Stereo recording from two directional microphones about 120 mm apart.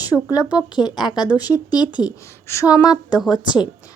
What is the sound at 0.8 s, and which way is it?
A woman's voice, 35° left (ahead or behind).